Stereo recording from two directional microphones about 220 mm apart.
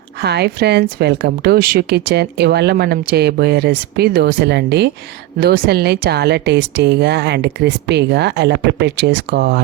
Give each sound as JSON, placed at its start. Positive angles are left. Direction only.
{"t": 0.2, "sound": "a woman's voice", "side_deg": -50}